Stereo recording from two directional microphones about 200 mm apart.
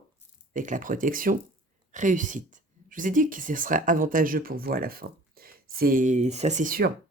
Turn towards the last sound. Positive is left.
turn(degrees=-45)  # may be behind; listen again after turning